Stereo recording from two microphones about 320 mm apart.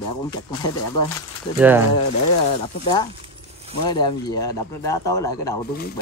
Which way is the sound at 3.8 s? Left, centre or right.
Centre.